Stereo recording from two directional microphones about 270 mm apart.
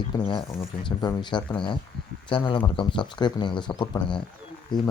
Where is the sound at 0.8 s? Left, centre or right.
Centre.